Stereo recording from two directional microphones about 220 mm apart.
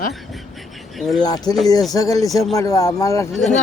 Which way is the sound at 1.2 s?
15° left (ahead or behind).